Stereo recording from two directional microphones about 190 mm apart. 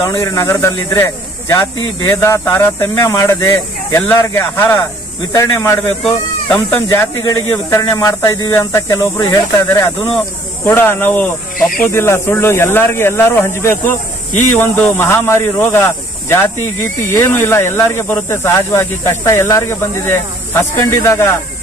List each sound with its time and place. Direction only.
0.0 s speech: 15° left (ahead or behind)
11.5 s speech: 45° left (ahead or behind)
11.9 s speech: 10° left (ahead or behind)